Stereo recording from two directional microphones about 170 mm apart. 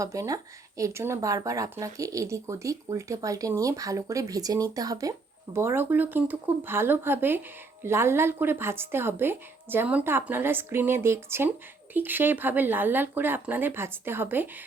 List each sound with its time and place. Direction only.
0.0 s a woman's voice: 20° right (ahead or behind)